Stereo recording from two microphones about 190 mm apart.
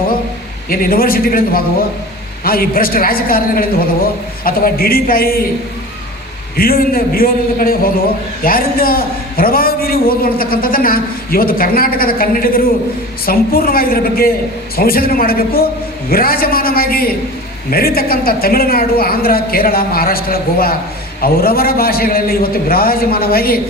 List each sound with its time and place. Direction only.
0.7 s a man's voice: 50° left (ahead or behind)
6.6 s a man's voice: 50° left (ahead or behind)